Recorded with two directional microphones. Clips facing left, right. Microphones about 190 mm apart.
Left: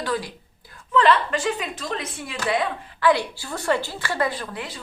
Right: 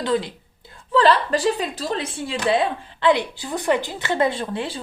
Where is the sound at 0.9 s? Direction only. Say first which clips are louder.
Right 2 dB; 35° right (ahead or behind).